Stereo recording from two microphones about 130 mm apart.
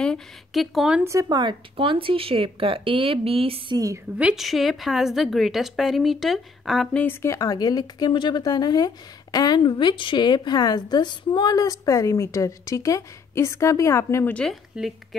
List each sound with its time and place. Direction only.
0.0 s speech: 5° left (ahead or behind)
1.3 s speech: 35° right (ahead or behind)
3.7 s a woman's voice: 25° right (ahead or behind)
4.2 s a woman's voice: 5° right (ahead or behind); by 14.3 s 20° left (ahead or behind)
14.3 s speech: centre (ahead or behind)